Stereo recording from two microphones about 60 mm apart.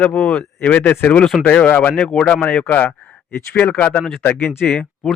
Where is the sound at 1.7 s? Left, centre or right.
Left.